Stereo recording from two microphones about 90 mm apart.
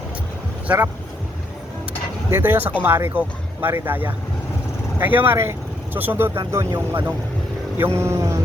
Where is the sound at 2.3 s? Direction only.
25° right (ahead or behind).